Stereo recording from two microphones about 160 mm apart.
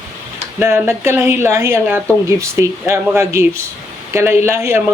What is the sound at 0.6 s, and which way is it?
A man's voice, 15° right (ahead or behind).